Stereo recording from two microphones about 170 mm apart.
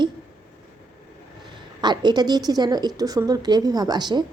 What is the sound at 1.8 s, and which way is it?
A woman's voice, 25° right (ahead or behind).